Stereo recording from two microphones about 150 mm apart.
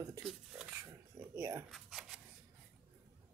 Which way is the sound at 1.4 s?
20° right (ahead or behind).